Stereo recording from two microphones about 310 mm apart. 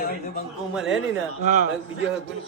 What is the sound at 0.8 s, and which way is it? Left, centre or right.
Speech, centre.